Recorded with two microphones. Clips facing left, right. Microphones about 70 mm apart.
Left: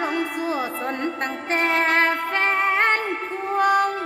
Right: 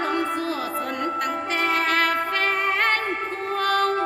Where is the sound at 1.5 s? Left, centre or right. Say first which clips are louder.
Left 3 dB; left.